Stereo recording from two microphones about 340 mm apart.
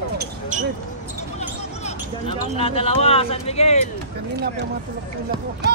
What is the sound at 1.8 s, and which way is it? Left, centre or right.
Speech, centre.